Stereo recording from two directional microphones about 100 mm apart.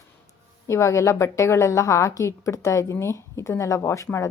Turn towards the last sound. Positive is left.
turn(degrees=30)  # may be behind; listen again after turning